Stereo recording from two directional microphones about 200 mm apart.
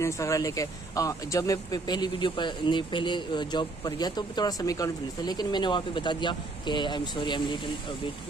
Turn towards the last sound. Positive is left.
turn(degrees=25)  # may be behind; listen again after turning